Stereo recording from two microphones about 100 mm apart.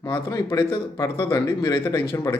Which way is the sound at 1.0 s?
30° left (ahead or behind).